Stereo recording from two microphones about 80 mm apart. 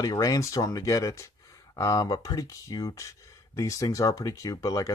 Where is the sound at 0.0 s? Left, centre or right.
Left.